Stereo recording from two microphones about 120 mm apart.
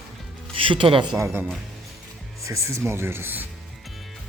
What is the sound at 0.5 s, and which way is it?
Speech, 45° right (ahead or behind).